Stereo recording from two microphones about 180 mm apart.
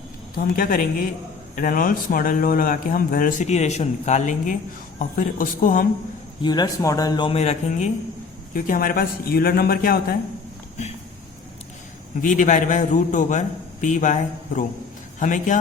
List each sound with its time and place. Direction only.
0.3 s a man's voice: 55° left (ahead or behind)
6.4 s speech: 25° left (ahead or behind)
8.5 s speech: 50° left (ahead or behind)
12.2 s a man's voice: 45° left (ahead or behind)